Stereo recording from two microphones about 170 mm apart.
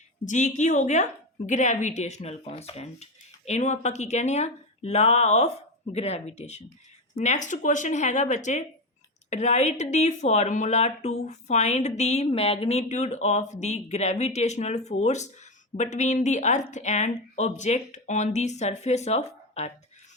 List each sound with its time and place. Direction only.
0.3 s speech: 45° left (ahead or behind)